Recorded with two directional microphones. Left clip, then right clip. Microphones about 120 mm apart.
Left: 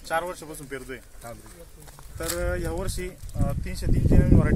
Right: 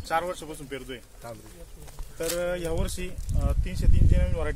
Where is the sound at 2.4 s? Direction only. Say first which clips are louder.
Right 1 dB; 30° right (ahead or behind).